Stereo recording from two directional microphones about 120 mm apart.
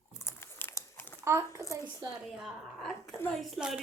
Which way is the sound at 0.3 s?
20° left (ahead or behind).